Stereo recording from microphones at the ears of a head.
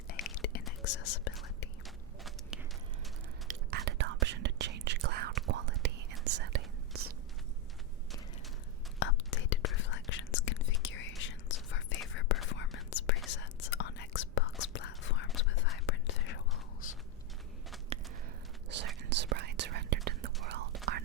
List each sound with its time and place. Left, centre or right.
0.1 s whispering: left
3.4 s whispering: right
9.0 s whispering: left
18.7 s whispering: right